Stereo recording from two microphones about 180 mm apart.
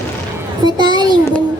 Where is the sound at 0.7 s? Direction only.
25° right (ahead or behind).